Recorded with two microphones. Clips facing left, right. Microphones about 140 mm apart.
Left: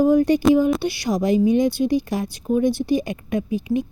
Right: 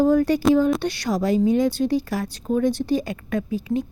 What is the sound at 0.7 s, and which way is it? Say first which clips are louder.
Speech: left 1 dB; 5° left (ahead or behind).